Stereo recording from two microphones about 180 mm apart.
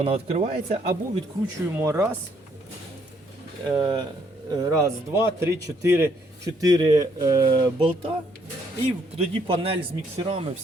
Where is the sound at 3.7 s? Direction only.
25° right (ahead or behind).